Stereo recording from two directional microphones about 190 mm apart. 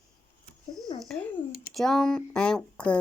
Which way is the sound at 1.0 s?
Centre (ahead or behind).